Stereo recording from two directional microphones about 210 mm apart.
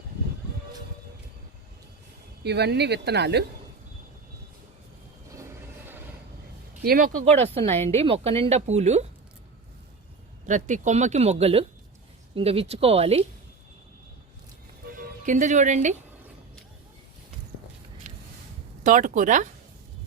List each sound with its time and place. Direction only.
2.4 s speech: 50° right (ahead or behind)
6.8 s speech: 40° right (ahead or behind)
7.9 s speech: 30° right (ahead or behind)
10.4 s speech: 35° right (ahead or behind)
14.9 s speech: 35° right (ahead or behind)
18.0 s a sound: 35° right (ahead or behind)
18.8 s speech: 40° right (ahead or behind)